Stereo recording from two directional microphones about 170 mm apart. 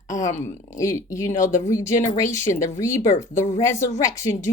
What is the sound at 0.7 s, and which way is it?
A woman's voice, 20° left (ahead or behind).